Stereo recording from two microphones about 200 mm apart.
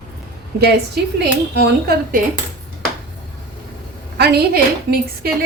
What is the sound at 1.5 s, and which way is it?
Speech, 50° right (ahead or behind).